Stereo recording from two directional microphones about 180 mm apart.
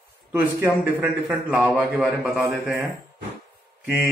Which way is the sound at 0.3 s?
10° right (ahead or behind).